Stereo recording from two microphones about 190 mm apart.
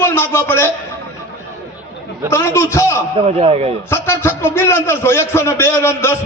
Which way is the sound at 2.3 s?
15° left (ahead or behind).